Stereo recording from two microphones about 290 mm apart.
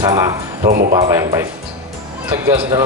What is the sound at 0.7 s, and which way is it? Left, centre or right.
Speech, right.